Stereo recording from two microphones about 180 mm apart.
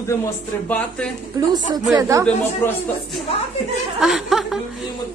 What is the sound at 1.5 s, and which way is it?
Speech, 20° right (ahead or behind).